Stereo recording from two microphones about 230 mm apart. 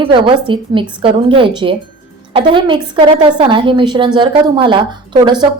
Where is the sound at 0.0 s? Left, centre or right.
Right.